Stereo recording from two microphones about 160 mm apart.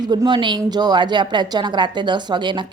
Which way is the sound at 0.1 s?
25° right (ahead or behind).